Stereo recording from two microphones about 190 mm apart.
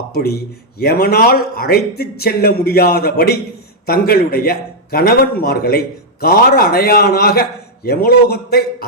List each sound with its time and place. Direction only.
0.1 s a man's voice: 55° left (ahead or behind)